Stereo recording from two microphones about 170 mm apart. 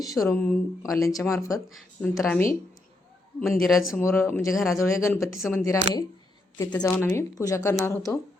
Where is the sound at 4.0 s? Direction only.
15° left (ahead or behind).